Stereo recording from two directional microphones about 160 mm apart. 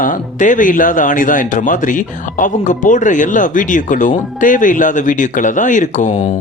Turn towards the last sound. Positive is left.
turn(degrees=50)  # may be behind; listen again after turning